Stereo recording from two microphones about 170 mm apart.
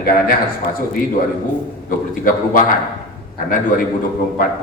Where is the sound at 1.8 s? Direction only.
55° left (ahead or behind).